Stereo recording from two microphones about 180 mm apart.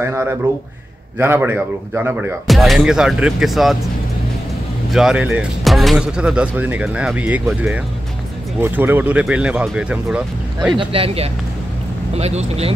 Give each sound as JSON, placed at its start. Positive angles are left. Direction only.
{"t": 0.0, "sound": "speech", "side_deg": -15}
{"t": 4.9, "sound": "speech", "side_deg": -5}
{"t": 10.8, "sound": "speech", "side_deg": -30}